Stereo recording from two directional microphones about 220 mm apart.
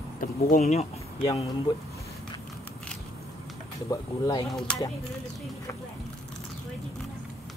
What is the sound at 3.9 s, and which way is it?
Speech, 15° left (ahead or behind).